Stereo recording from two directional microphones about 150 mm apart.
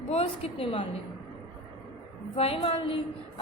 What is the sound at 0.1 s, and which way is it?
Speech, 40° left (ahead or behind).